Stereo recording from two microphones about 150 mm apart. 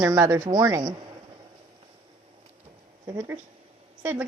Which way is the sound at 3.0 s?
20° right (ahead or behind).